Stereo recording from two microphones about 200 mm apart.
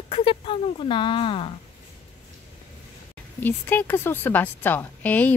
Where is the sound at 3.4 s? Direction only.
10° left (ahead or behind).